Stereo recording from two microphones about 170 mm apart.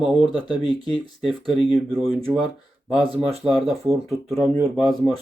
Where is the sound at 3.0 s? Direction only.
35° right (ahead or behind).